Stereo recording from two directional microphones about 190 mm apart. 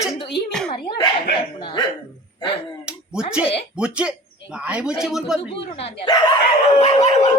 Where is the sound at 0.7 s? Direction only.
20° left (ahead or behind).